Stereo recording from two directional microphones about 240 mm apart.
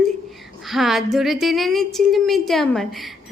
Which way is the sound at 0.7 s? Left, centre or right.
Centre.